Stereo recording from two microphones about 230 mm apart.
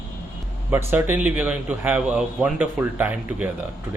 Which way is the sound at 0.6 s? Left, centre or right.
Centre.